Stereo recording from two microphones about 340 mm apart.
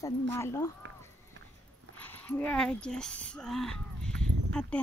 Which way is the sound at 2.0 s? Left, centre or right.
Centre.